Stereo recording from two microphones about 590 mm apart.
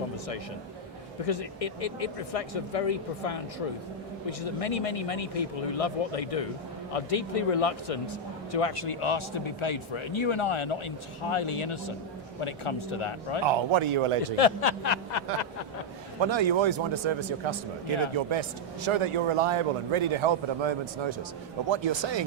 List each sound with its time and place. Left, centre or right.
1.2 s a man's voice: left
13.5 s a man's voice: right
14.3 s speech: left
16.2 s a man's voice: right